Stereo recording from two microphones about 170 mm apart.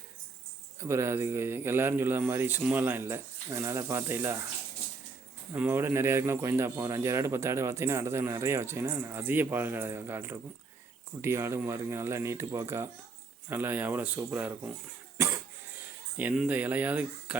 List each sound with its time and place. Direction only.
0.8 s speech: 15° right (ahead or behind)
5.5 s speech: 10° right (ahead or behind)
15.2 s cough: 15° right (ahead or behind)
16.1 s speech: 5° right (ahead or behind)